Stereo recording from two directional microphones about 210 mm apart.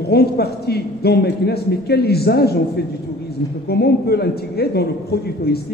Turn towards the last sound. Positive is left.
turn(degrees=50)  # may be behind; listen again after turning